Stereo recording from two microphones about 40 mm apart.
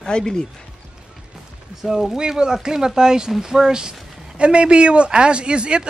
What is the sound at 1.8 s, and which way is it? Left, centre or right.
Speech, centre.